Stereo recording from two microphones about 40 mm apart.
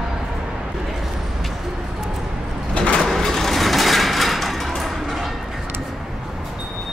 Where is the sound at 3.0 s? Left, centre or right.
Centre.